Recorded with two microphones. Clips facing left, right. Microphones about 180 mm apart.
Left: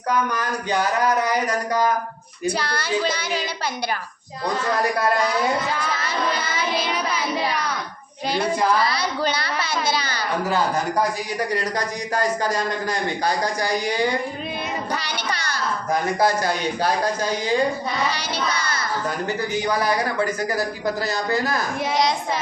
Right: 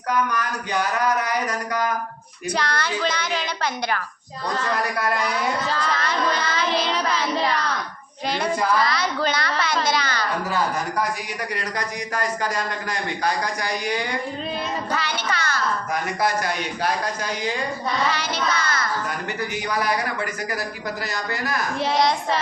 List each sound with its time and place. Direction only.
0.3 s speech: 30° left (ahead or behind)
2.5 s a child's voice: 10° left (ahead or behind)
5.7 s a child's voice: 10° left (ahead or behind)
12.1 s speech: 30° left (ahead or behind)
14.9 s music: 15° left (ahead or behind)
15.9 s speech: 30° left (ahead or behind)
18.1 s a child's voice: 10° left (ahead or behind)
18.6 s music: 30° left (ahead or behind)
19.6 s speech: 30° left (ahead or behind)